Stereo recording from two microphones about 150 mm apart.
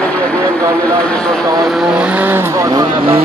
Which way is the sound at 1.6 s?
5° right (ahead or behind).